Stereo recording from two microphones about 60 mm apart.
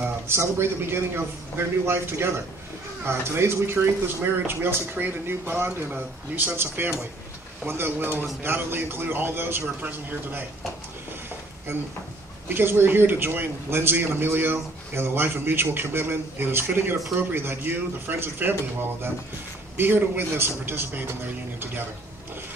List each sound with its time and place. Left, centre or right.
0.3 s a man's voice: right
11.7 s a man's voice: right